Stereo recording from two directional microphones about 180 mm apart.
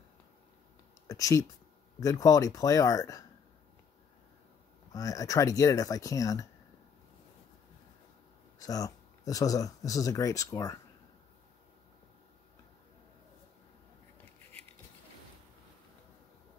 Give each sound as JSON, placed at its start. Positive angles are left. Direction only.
{"t": 1.0, "sound": "a sound", "side_deg": 20}
{"t": 2.0, "sound": "speech", "side_deg": 20}
{"t": 4.9, "sound": "speech", "side_deg": 20}
{"t": 8.5, "sound": "speech", "side_deg": 20}